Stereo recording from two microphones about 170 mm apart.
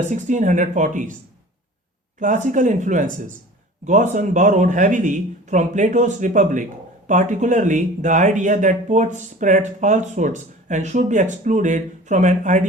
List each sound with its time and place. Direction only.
0.1 s speech: 45° right (ahead or behind)
2.1 s speech: 50° right (ahead or behind)